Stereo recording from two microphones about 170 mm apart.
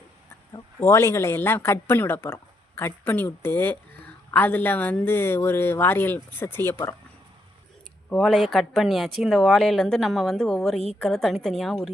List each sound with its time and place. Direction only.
0.5 s speech: 15° left (ahead or behind)
8.1 s speech: centre (ahead or behind)